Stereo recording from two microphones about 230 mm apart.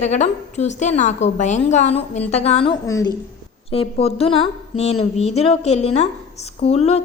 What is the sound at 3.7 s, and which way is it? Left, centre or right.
A woman's voice, left.